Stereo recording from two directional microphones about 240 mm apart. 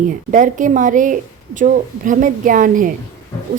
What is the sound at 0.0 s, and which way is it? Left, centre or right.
Speech, right.